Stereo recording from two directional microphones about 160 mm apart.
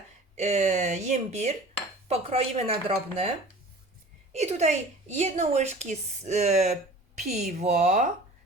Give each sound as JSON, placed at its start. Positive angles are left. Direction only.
{"t": 0.3, "sound": "a woman's voice", "side_deg": -45}